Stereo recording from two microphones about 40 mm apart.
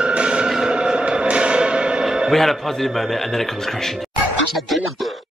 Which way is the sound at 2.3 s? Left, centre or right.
Centre.